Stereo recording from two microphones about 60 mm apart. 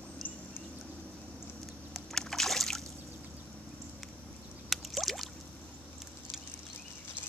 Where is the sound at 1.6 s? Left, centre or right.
Centre.